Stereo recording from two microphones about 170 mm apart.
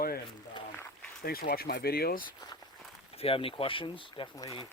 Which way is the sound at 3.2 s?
35° left (ahead or behind).